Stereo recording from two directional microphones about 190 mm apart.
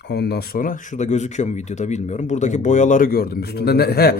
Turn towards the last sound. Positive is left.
turn(degrees=55)  # may be behind; listen again after turning